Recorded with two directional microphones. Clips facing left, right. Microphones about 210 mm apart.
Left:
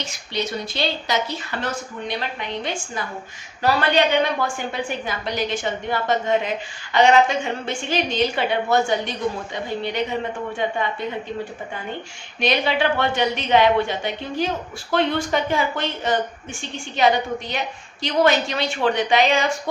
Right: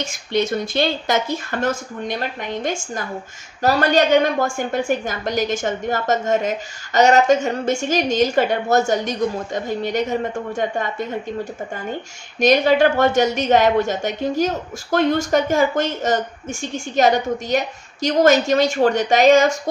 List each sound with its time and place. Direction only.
0.0 s a woman's voice: 50° right (ahead or behind)
12.4 s a woman's voice: 45° right (ahead or behind)